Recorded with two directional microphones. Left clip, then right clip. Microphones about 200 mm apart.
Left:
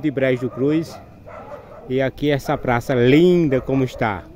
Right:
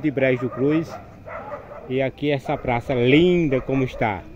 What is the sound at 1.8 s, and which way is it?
Speech, 30° left (ahead or behind).